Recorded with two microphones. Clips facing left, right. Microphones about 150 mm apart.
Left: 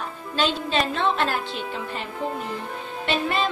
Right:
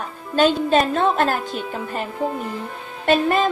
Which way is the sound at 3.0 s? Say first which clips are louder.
Right 7 dB; 45° right (ahead or behind).